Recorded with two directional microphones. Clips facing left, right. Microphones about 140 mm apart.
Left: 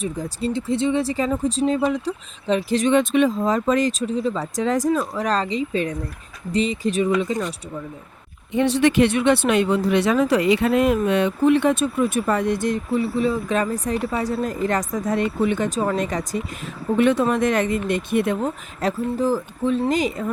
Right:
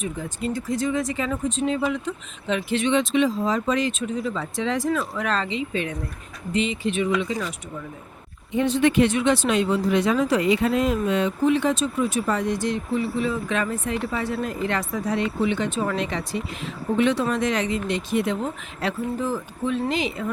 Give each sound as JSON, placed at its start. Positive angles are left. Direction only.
{"t": 0.0, "sound": "speech", "side_deg": 35}
{"t": 8.5, "sound": "speech", "side_deg": 75}
{"t": 18.4, "sound": "speech", "side_deg": 40}